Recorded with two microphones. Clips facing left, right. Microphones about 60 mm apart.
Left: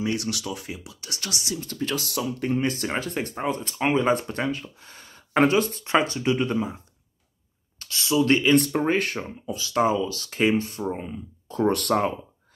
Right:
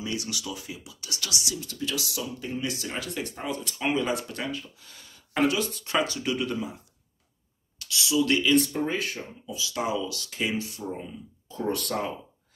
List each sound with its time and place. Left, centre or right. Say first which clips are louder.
0.0 s speech: left 5 dB; left
7.8 s speech: left 3 dB; left
8.5 s speech: left 4 dB; left
11.5 s speech: left 7 dB; left